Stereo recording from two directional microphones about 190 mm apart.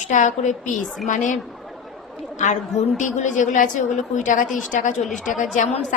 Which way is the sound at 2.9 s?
40° left (ahead or behind).